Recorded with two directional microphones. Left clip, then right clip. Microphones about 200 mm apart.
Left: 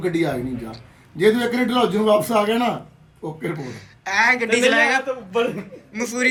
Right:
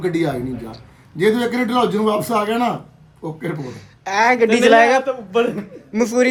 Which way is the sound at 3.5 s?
25° right (ahead or behind).